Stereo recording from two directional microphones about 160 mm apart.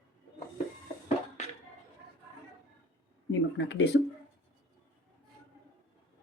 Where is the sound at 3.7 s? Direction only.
90° left.